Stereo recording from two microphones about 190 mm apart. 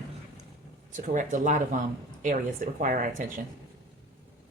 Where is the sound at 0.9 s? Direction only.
40° right (ahead or behind).